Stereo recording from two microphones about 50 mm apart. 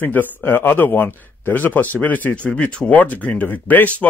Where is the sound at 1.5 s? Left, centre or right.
Left.